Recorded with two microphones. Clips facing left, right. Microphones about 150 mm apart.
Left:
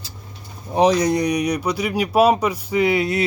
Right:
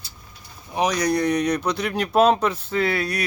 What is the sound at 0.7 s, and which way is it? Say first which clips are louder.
Speech: left 5 dB; 30° left (ahead or behind).